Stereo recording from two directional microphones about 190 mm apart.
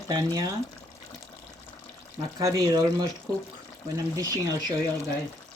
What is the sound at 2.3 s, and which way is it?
Speech, 20° right (ahead or behind).